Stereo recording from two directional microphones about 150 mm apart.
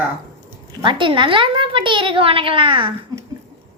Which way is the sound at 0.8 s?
35° right (ahead or behind).